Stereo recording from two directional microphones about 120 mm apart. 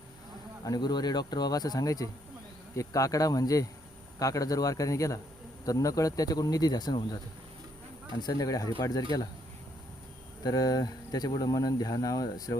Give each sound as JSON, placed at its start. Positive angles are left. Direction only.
{"t": 0.6, "sound": "a man's voice", "side_deg": 35}
{"t": 8.2, "sound": "speech", "side_deg": 30}
{"t": 10.4, "sound": "speech", "side_deg": 30}